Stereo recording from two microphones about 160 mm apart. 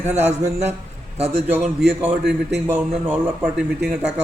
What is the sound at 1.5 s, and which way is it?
Speech, 10° right (ahead or behind).